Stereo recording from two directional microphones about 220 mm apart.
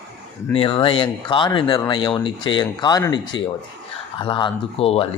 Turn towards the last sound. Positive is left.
turn(degrees=25)  # may be behind; listen again after turning